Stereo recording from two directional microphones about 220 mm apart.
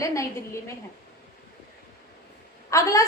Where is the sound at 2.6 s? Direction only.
15° left (ahead or behind).